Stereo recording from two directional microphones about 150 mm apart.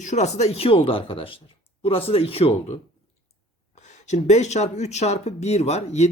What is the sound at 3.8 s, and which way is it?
Speech, 50° left (ahead or behind).